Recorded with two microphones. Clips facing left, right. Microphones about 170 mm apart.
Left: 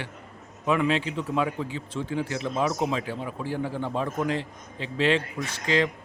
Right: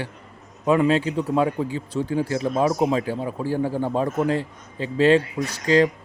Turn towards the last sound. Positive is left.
turn(degrees=-40)  # may be behind; listen again after turning